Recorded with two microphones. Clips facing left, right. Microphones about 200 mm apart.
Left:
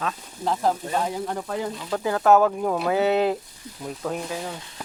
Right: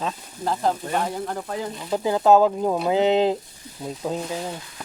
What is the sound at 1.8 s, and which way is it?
Speech, 15° right (ahead or behind).